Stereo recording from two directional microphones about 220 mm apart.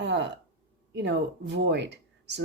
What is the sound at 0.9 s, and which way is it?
Speech, 50° right (ahead or behind).